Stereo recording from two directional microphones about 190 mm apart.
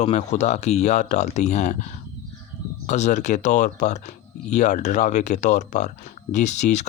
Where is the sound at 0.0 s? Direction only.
35° left (ahead or behind).